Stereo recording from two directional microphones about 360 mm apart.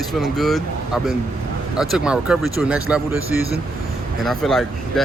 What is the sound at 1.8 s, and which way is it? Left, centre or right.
Speech, centre.